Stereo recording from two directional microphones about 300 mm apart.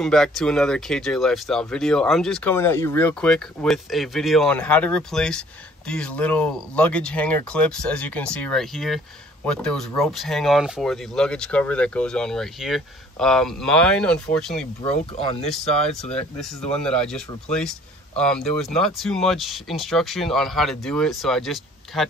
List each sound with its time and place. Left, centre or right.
0.0 s speech: centre
14.8 s speech: centre
15.4 s speech: centre